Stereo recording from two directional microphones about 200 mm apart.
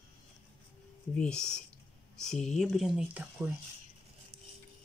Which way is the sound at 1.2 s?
5° left (ahead or behind).